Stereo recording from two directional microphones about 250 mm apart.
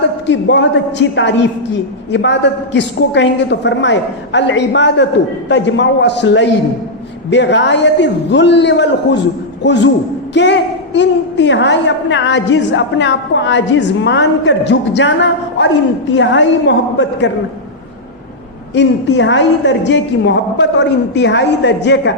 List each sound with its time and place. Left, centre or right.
0.3 s a woman's voice: left
18.7 s a woman's voice: left